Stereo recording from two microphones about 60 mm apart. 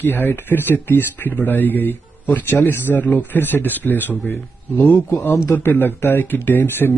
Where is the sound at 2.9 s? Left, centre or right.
Left.